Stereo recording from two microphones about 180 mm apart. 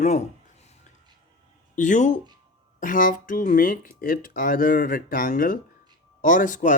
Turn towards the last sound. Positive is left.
turn(degrees=45)  # may be behind; listen again after turning